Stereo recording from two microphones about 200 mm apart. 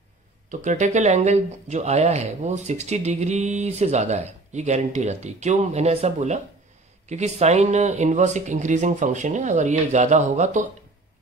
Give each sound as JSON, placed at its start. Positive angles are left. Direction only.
{"t": 0.5, "sound": "speech", "side_deg": -35}